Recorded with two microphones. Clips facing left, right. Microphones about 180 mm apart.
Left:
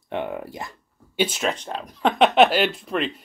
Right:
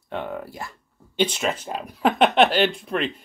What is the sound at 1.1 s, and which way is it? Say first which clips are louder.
Speech: even; 5° left (ahead or behind).